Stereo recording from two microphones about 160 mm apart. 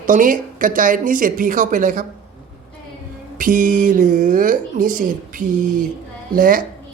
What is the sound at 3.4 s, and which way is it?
A woman's voice, 55° right (ahead or behind).